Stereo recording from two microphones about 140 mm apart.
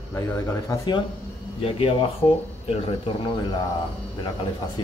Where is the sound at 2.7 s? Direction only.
45° left (ahead or behind).